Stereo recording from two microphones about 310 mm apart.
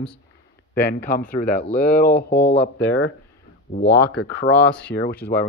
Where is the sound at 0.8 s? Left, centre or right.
Left.